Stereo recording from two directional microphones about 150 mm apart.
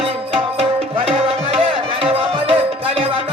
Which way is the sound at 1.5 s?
40° right (ahead or behind).